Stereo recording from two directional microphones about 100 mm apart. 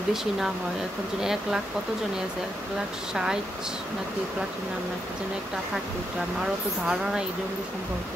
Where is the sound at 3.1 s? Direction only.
5° right (ahead or behind).